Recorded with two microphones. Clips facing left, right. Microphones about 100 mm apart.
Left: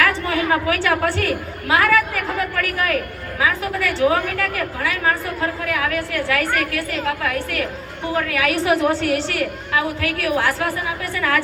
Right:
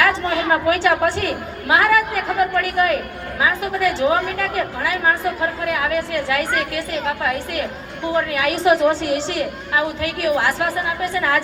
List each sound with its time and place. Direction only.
0.0 s a woman's voice: 20° right (ahead or behind)